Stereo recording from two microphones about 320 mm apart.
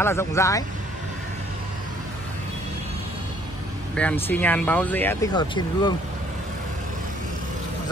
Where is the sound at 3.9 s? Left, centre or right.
Centre.